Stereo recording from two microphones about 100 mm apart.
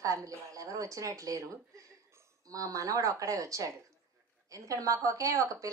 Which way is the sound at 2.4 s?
35° right (ahead or behind).